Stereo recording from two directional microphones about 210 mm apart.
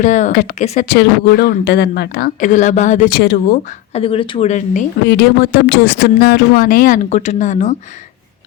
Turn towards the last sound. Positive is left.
turn(degrees=35)  # may be behind; listen again after turning